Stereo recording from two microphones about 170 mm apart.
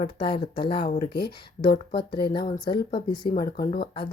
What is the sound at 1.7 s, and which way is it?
Speech, 65° left (ahead or behind).